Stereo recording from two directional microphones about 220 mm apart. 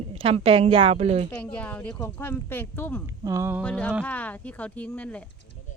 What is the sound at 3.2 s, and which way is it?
Speech, 15° right (ahead or behind).